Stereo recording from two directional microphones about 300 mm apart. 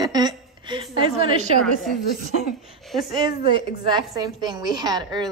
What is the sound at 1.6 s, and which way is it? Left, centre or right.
Speech, centre.